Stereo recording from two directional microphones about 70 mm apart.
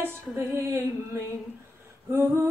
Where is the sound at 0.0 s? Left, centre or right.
Right.